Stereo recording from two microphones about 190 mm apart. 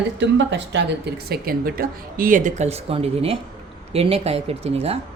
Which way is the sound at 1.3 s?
50° right (ahead or behind).